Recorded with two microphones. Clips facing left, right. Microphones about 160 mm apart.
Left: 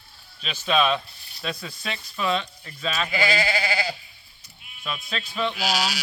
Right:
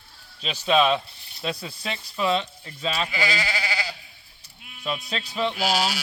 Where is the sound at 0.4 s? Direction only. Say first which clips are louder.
Right 2 dB; 30° right (ahead or behind).